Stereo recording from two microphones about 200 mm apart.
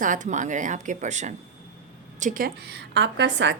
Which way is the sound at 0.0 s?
40° right (ahead or behind).